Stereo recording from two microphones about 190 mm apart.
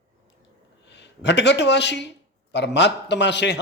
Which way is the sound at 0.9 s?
65° left (ahead or behind).